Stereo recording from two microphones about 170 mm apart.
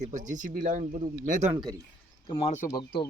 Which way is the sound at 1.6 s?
20° right (ahead or behind).